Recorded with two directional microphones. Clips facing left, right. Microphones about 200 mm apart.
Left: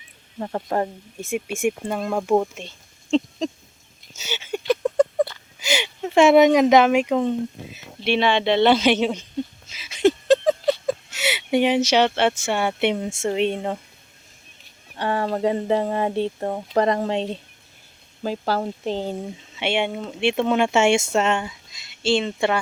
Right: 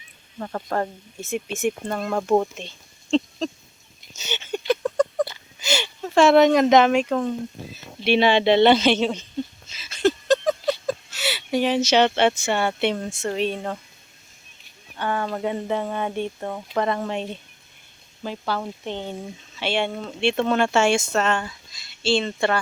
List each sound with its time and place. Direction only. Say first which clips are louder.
0.3 s speech: left 2 dB; 25° left (ahead or behind); by 3.4 s 5° left (ahead or behind)
4.1 s a sound: even; 10° left (ahead or behind)
4.8 s a sound: left 3 dB; 25° left (ahead or behind)
5.5 s speech: left 1 dB; 15° left (ahead or behind)
8.0 s speech: right 2 dB; 5° right (ahead or behind); by 9.2 s 10° left (ahead or behind)
9.6 s a sound: left 3 dB; 10° left (ahead or behind)
14.9 s speech: left 3 dB; 30° left (ahead or behind)
18.2 s speech: left 4 dB; 40° left (ahead or behind)
19.5 s speech: left 1 dB; 20° left (ahead or behind)